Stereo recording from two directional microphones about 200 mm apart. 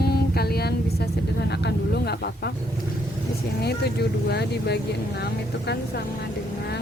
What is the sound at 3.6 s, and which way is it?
Speech, 55° left (ahead or behind).